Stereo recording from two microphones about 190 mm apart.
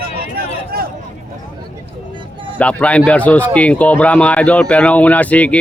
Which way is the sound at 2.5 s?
5° left (ahead or behind).